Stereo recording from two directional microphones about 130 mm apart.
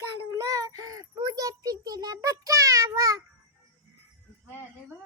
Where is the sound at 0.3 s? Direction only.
25° right (ahead or behind).